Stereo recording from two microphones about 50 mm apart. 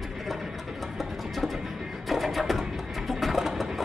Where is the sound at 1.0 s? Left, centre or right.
Centre.